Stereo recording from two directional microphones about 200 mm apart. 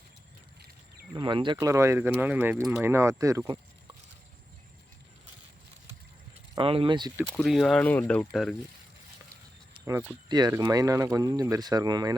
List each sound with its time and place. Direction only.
1.1 s speech: 25° right (ahead or behind)
6.6 s speech: 25° right (ahead or behind)
7.4 s speech: centre (ahead or behind)
10.2 s speech: 20° right (ahead or behind)